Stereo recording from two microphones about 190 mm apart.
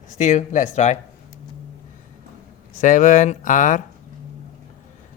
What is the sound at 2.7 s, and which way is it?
Speech, 40° left (ahead or behind).